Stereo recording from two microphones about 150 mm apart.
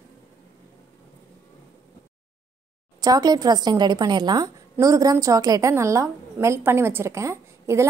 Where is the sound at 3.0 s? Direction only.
25° right (ahead or behind).